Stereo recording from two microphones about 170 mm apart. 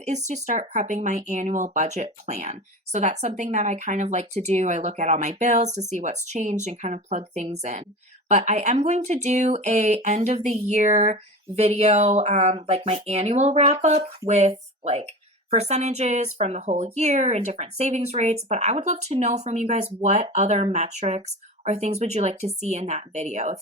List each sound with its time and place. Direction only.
0.0 s speech: 45° right (ahead or behind)